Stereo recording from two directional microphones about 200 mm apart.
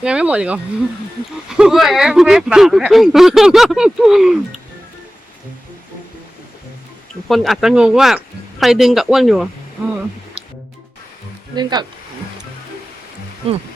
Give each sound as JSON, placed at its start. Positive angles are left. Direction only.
{"t": 0.0, "sound": "speech", "side_deg": -5}
{"t": 7.3, "sound": "speech", "side_deg": 0}
{"t": 11.5, "sound": "speech", "side_deg": -20}
{"t": 13.4, "sound": "speech", "side_deg": -30}